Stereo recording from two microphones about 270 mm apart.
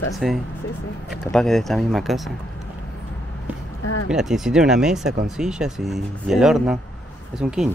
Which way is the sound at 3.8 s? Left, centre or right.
Left.